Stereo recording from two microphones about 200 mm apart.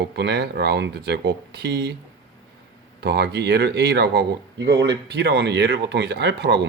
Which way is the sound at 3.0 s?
60° right (ahead or behind).